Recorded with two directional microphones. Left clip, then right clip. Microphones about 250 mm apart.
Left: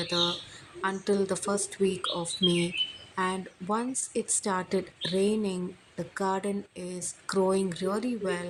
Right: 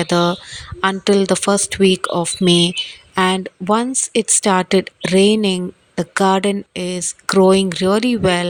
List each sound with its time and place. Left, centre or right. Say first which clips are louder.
0.0 s speech: right 12 dB; right